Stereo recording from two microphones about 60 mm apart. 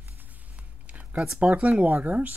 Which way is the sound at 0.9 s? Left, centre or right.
Right.